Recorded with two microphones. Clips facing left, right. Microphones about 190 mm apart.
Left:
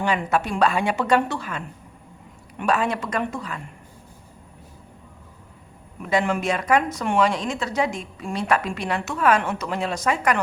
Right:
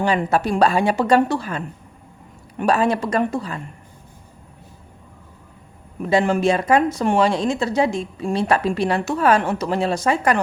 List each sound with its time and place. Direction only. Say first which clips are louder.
0.0 s speech: right 4 dB; 35° right (ahead or behind)
6.0 s speech: right 5 dB; 30° right (ahead or behind)